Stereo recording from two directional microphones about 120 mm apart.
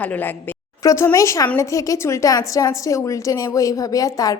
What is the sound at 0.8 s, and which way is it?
A woman's voice, 25° left (ahead or behind).